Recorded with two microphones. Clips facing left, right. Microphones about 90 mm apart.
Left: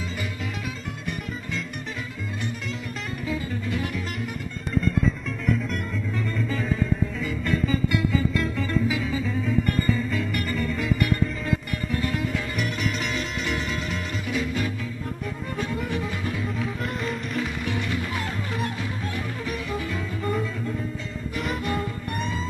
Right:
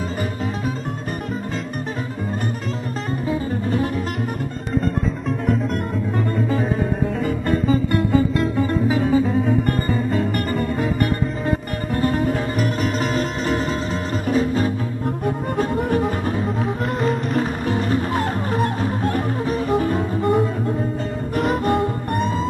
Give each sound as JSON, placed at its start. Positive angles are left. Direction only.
{"t": 3.3, "sound": "music", "side_deg": -40}
{"t": 6.3, "sound": "music", "side_deg": -45}
{"t": 20.2, "sound": "music", "side_deg": -60}
{"t": 21.4, "sound": "music", "side_deg": -40}